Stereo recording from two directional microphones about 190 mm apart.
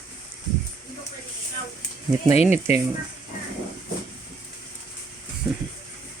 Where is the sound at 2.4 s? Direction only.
10° right (ahead or behind).